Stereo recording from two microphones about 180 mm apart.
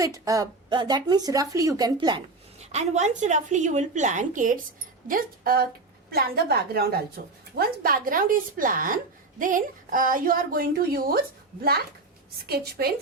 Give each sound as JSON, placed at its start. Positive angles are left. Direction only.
{"t": 0.0, "sound": "speech", "side_deg": -20}
{"t": 2.6, "sound": "a woman's voice", "side_deg": -40}
{"t": 12.5, "sound": "a woman's voice", "side_deg": -60}